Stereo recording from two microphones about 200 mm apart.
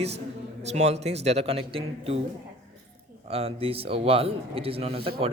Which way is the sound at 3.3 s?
30° right (ahead or behind).